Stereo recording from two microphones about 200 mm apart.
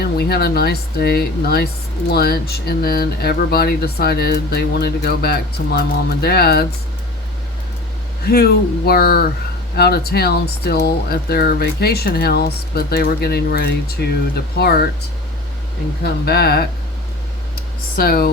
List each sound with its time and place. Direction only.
0.0 s speech: 50° left (ahead or behind)
8.2 s speech: 50° left (ahead or behind)
16.2 s speech: 50° left (ahead or behind)
17.9 s speech: 45° left (ahead or behind)